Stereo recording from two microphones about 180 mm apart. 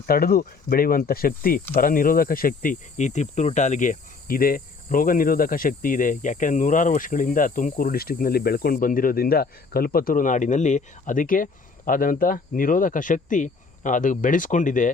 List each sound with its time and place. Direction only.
0.0 s speech: 55° left (ahead or behind)